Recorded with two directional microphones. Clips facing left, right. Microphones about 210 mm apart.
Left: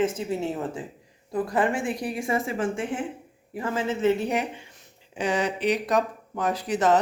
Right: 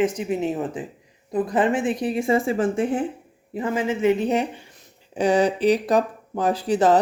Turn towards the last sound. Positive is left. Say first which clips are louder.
# right 4 dB
turn(degrees=-30)  # may be behind; listen again after turning